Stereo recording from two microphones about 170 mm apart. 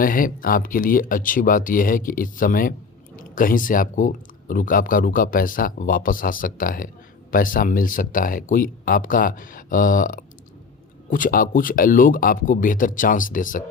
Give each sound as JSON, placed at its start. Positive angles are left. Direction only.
{"t": 0.0, "sound": "speech", "side_deg": 55}